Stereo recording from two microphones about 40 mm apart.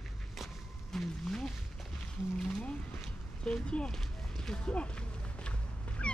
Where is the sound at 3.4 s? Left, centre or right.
Left.